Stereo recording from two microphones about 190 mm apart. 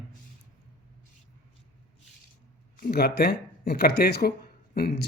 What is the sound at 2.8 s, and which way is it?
Speech, 55° left (ahead or behind).